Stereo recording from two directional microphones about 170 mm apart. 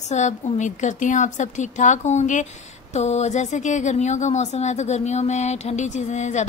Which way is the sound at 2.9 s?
40° left (ahead or behind).